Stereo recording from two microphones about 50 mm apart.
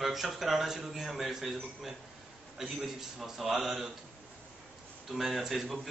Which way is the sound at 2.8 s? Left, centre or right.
Centre.